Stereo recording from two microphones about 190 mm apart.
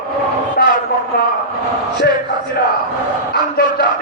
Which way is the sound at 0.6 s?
55° left (ahead or behind).